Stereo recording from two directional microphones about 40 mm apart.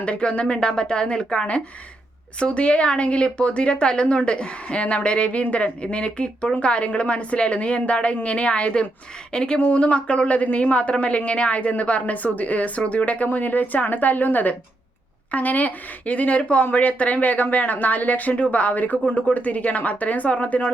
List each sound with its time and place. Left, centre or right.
0.0 s a woman's voice: left
9.3 s a woman's voice: left
9.6 s speech: left
13.2 s speech: left